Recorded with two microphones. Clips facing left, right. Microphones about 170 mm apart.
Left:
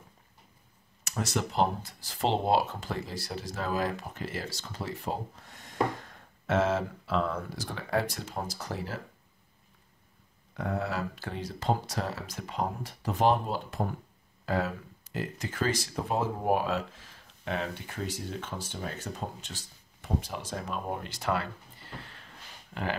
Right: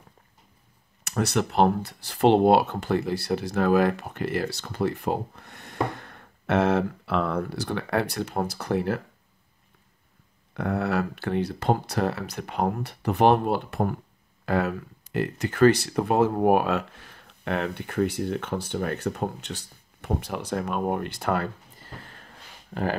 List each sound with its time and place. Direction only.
1.0 s speech: 65° right (ahead or behind)
10.5 s speech: 65° right (ahead or behind); by 22.9 s 40° right (ahead or behind)